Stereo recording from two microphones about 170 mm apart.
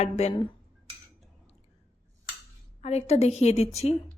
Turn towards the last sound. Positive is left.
turn(degrees=40)  # may be behind; listen again after turning